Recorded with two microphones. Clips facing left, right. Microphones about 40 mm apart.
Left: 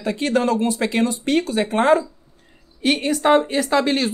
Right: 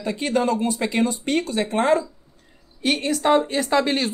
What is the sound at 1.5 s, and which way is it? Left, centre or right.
Speech, left.